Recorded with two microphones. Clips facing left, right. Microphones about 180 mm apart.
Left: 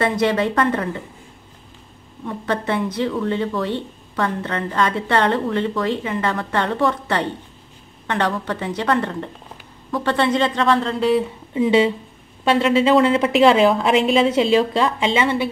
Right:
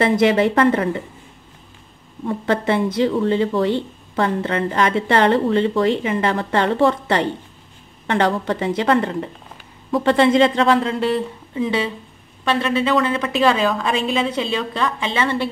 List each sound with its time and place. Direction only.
0.4 s speech: 25° right (ahead or behind)
2.2 s speech: 25° right (ahead or behind)
10.8 s speech: centre (ahead or behind)
11.5 s a woman's voice: 25° left (ahead or behind)